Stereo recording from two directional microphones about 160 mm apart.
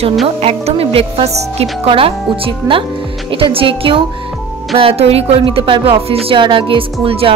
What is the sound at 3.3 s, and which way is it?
Speech, 35° right (ahead or behind).